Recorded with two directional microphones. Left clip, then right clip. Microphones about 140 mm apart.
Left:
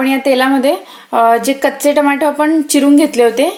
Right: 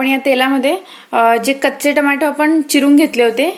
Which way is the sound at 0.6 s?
40° left (ahead or behind).